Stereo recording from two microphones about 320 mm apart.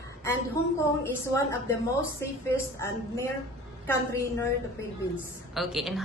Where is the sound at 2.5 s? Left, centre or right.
Centre.